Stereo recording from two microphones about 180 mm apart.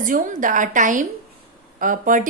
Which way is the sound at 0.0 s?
45° right (ahead or behind).